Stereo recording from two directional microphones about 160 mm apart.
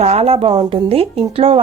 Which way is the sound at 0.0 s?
40° right (ahead or behind).